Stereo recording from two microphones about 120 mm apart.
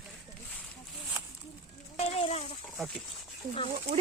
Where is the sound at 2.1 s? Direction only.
60° left (ahead or behind).